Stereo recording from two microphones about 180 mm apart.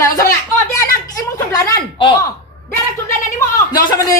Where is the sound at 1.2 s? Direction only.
20° left (ahead or behind).